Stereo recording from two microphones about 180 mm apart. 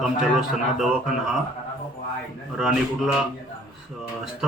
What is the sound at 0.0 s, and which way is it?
Speech, 5° right (ahead or behind).